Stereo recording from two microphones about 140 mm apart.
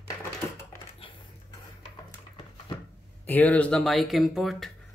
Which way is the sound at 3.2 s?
10° left (ahead or behind).